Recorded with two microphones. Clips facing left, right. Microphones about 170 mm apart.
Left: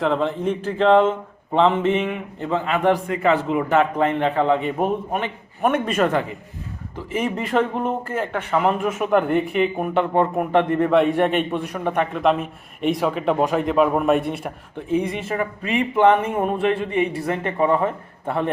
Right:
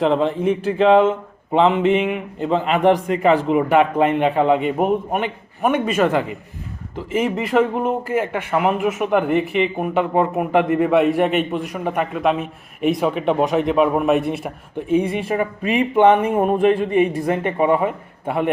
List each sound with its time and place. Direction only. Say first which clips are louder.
0.0 s a man's voice: right 3 dB; 15° right (ahead or behind)
13.1 s a man's voice: right 2 dB; 10° right (ahead or behind)
13.8 s speech: right 2 dB; 5° right (ahead or behind)
14.8 s a man's voice: right 4 dB; 15° right (ahead or behind)